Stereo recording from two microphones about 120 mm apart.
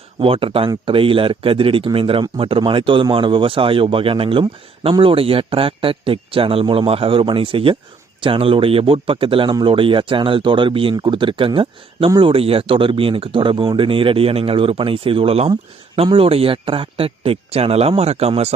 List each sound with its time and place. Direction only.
0.2 s speech: 50° right (ahead or behind)